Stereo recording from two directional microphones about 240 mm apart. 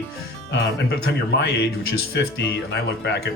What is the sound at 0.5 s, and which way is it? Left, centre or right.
Speech, left.